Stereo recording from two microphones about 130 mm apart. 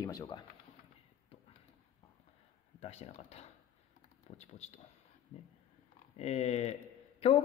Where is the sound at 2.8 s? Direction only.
55° left (ahead or behind).